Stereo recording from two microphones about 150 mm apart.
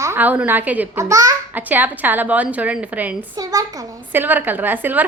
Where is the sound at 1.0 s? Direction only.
25° right (ahead or behind).